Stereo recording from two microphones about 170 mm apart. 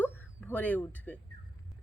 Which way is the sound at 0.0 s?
10° left (ahead or behind).